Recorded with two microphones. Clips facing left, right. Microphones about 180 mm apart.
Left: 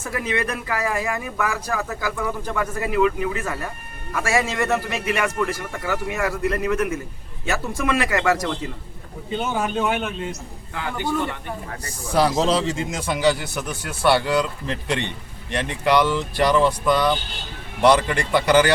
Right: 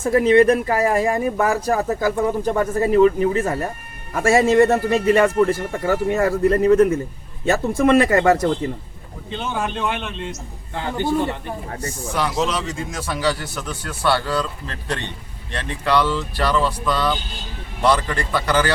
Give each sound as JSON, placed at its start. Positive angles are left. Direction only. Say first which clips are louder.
{"t": 0.0, "sound": "speech", "louder": "right 12 dB", "side_deg": -30}
{"t": 9.3, "sound": "a man's voice", "louder": "left 2 dB", "side_deg": 5}
{"t": 11.8, "sound": "speech", "louder": "left 5 dB", "side_deg": 35}